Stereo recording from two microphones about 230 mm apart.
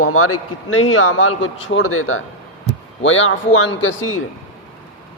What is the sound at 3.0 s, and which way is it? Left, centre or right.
A man's voice, left.